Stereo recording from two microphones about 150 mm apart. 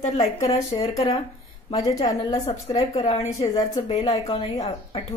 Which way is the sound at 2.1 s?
45° left (ahead or behind).